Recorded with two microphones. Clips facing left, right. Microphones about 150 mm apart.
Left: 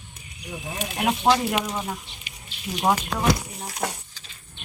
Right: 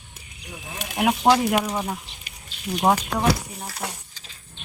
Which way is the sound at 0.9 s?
15° right (ahead or behind).